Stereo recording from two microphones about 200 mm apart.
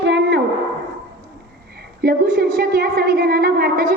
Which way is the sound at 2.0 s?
50° right (ahead or behind).